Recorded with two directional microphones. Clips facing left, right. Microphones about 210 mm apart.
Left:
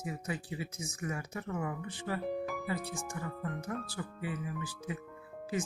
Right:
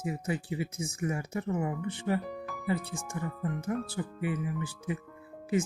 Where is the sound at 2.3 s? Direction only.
Centre (ahead or behind).